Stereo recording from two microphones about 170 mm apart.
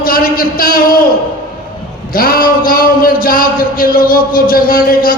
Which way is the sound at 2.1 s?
60° left (ahead or behind).